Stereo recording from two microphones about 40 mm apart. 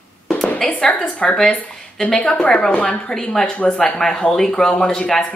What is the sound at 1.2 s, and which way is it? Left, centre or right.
A woman's voice, centre.